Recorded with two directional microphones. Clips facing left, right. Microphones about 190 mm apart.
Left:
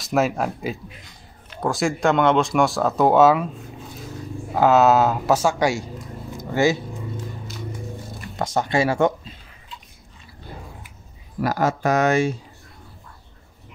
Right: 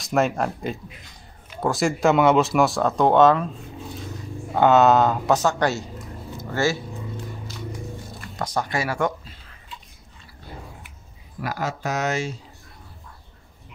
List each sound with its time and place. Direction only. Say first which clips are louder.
0.0 s speech: left 1 dB; centre (ahead or behind)
4.6 s speech: even; centre (ahead or behind)
6.3 s a sound: left 4 dB; 15° left (ahead or behind)
8.4 s speech: left 5 dB; 25° left (ahead or behind)
11.4 s speech: left 7 dB; 45° left (ahead or behind)